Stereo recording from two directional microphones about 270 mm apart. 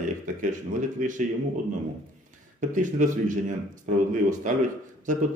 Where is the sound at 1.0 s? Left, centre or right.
Right.